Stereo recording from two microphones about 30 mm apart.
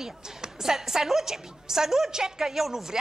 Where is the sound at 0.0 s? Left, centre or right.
Centre.